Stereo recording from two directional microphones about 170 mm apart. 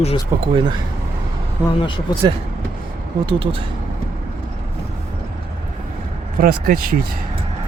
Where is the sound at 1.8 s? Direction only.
30° left (ahead or behind).